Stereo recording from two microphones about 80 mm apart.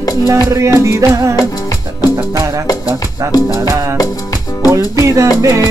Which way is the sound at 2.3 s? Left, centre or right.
Right.